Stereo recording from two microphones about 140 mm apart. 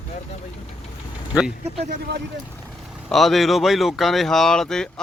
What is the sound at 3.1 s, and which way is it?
Speech, centre (ahead or behind).